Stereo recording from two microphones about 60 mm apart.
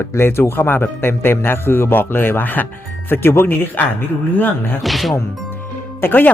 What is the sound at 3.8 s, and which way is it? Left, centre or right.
Speech, left.